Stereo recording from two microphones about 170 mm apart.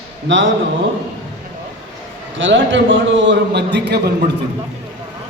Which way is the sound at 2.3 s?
90° right.